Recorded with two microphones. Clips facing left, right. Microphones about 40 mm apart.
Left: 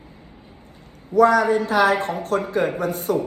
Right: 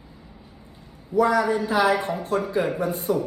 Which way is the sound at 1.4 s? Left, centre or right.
Left.